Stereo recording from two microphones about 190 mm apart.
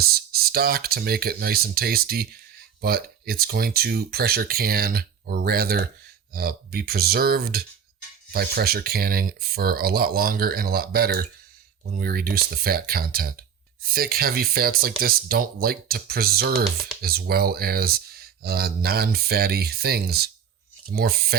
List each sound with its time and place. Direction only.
0.0 s speech: 55° right (ahead or behind)